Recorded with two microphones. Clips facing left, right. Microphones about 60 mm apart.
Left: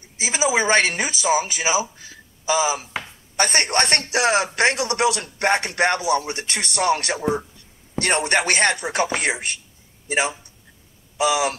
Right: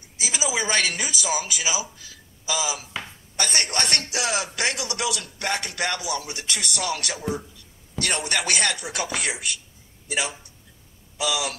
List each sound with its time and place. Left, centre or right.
0.2 s speech: left